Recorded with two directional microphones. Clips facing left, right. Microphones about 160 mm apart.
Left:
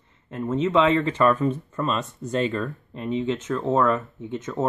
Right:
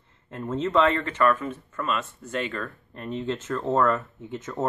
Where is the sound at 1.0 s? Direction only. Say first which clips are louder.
Left 3 dB; 30° left (ahead or behind).